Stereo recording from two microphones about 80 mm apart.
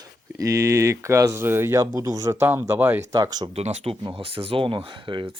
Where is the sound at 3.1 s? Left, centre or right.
Right.